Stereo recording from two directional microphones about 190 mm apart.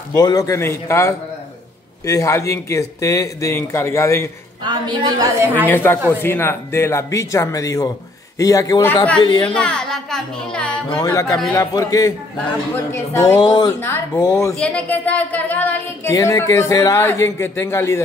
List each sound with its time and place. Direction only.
0.1 s speech: 20° left (ahead or behind)
4.6 s a woman's voice: 25° right (ahead or behind)
5.7 s a woman's voice: 10° left (ahead or behind)
9.5 s speech: 5° left (ahead or behind)
11.0 s speech: 15° left (ahead or behind)
13.7 s speech: 10° left (ahead or behind)